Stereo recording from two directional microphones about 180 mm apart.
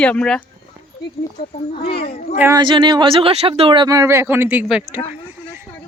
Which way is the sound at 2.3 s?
15° right (ahead or behind).